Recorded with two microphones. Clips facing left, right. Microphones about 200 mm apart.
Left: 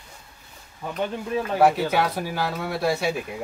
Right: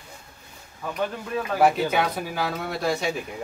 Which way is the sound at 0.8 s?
20° left (ahead or behind).